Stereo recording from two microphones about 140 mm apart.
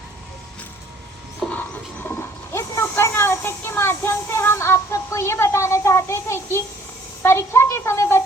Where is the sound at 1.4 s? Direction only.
10° left (ahead or behind).